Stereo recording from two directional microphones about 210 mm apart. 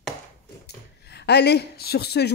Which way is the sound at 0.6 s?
50° left (ahead or behind).